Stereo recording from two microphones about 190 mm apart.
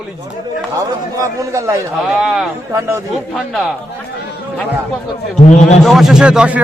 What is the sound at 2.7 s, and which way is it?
Speech, 15° right (ahead or behind).